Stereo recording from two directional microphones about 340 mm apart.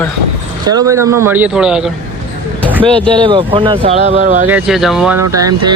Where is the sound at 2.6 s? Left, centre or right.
Centre.